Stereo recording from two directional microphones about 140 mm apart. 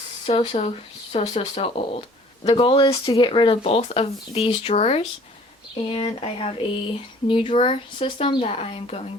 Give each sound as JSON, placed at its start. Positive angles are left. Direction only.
{"t": 0.3, "sound": "speech", "side_deg": 40}